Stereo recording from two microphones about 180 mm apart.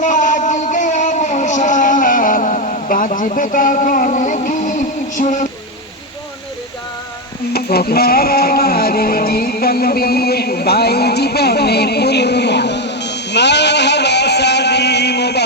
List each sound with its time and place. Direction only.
0.0 s music: 45° left (ahead or behind)
7.5 s music: 60° left (ahead or behind)